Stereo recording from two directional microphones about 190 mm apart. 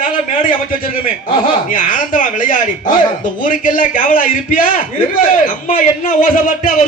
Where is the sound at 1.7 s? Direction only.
45° left (ahead or behind).